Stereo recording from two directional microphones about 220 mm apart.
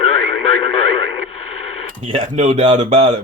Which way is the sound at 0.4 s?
25° left (ahead or behind).